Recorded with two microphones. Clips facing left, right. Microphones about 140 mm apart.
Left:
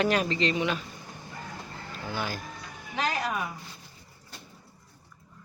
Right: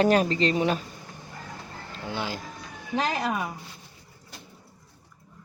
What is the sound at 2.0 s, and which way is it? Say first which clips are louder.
Speech: right 2 dB; 25° right (ahead or behind).